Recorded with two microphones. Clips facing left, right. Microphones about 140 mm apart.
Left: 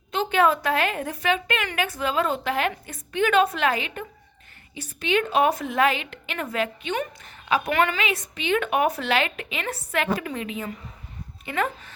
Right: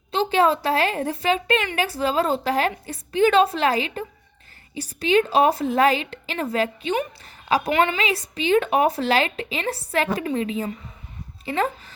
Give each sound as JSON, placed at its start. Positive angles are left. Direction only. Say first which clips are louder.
{"t": 0.1, "sound": "a woman's voice", "louder": "right 2 dB", "side_deg": -30}
{"t": 7.7, "sound": "a woman's voice", "louder": "right 2 dB", "side_deg": -20}
{"t": 8.0, "sound": "a woman's voice", "louder": "right 3 dB", "side_deg": -35}